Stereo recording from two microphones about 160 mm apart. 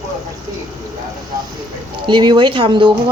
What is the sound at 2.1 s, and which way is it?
Speech, 30° right (ahead or behind).